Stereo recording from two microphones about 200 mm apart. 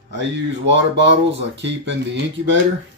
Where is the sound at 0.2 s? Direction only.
65° right (ahead or behind).